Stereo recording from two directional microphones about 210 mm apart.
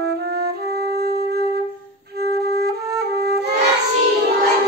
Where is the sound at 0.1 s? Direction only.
50° right (ahead or behind).